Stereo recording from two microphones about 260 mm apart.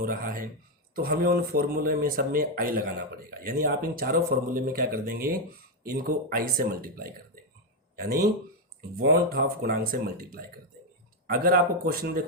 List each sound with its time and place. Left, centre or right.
0.0 s speech: right
9.3 s speech: right